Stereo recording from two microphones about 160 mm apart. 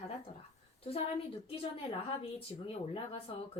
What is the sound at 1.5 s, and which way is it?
Speech, 35° left (ahead or behind).